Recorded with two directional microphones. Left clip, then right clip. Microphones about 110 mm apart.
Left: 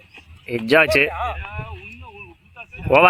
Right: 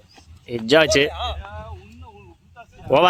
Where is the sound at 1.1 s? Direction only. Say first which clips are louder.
Left 3 dB; 30° left (ahead or behind).